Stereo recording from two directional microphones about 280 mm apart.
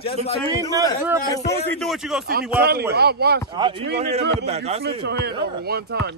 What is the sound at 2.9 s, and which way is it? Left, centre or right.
Speech, right.